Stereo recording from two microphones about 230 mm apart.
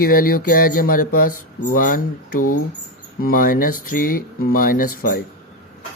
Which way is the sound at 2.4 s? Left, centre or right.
Left.